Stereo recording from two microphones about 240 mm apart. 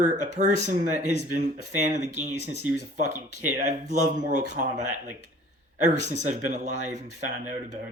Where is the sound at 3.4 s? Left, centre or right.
Right.